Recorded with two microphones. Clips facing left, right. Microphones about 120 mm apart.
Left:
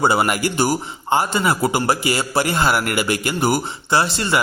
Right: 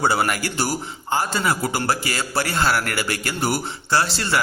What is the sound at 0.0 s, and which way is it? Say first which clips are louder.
A man's voice: left 3 dB; 20° left (ahead or behind).